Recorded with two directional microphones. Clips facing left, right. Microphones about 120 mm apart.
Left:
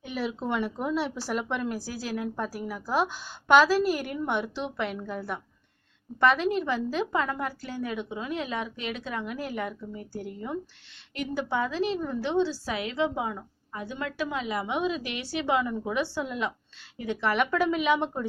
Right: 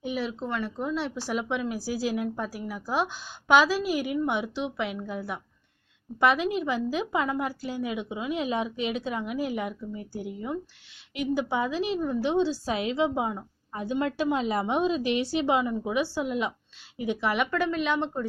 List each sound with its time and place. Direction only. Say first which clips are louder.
0.1 s a woman's voice: left 1 dB; centre (ahead or behind)
1.9 s a woman's voice: right 5 dB; 15° right (ahead or behind)
2.3 s a woman's voice: left 1 dB; centre (ahead or behind)